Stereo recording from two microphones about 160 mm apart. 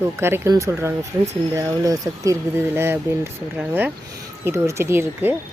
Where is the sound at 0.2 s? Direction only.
15° right (ahead or behind).